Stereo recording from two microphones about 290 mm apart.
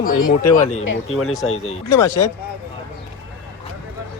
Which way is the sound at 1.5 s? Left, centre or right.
Left.